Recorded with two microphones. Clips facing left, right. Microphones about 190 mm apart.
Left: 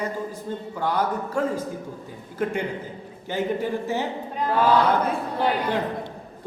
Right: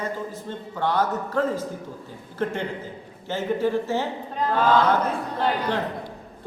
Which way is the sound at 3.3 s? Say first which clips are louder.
Right 2 dB; 15° left (ahead or behind).